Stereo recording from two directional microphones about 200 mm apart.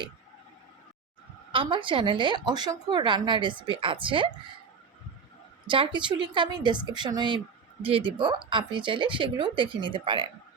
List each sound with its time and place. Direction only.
1.5 s a woman's voice: 25° right (ahead or behind)
5.6 s a woman's voice: 25° right (ahead or behind)